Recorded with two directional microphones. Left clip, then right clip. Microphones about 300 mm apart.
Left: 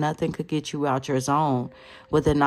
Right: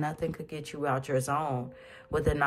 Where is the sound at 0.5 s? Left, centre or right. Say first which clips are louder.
Left 7 dB; centre.